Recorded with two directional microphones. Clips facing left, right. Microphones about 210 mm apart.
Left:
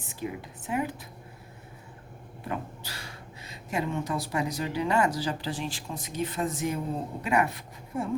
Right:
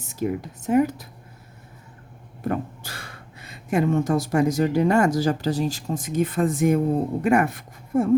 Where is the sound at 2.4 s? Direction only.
50° right (ahead or behind).